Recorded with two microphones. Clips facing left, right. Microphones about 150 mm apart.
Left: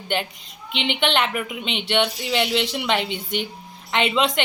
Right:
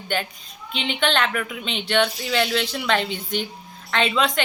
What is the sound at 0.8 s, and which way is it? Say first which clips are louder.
Speech: left 1 dB; 20° left (ahead or behind).